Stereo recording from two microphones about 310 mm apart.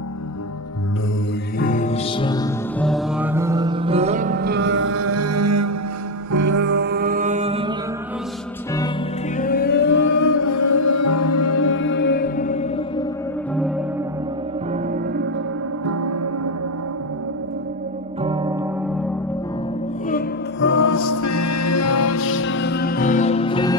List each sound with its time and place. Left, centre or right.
1.6 s music: left
2.8 s mantra: centre; by 5.7 s right
6.5 s music: right; by 7.7 s centre
9.4 s music: left
10.1 s music: left
15.8 s gong: right
18.2 s music: centre
20.1 s music: left
20.7 s music: left; by 23.8 s centre